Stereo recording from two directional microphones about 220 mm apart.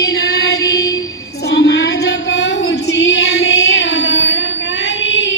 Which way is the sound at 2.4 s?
50° left (ahead or behind).